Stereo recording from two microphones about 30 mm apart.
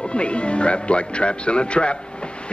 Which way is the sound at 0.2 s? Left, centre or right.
Left.